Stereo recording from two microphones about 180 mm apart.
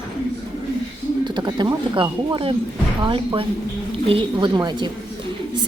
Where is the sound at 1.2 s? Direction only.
25° right (ahead or behind).